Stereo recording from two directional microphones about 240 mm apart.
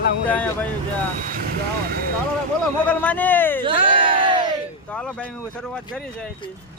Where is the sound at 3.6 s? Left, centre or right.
Right.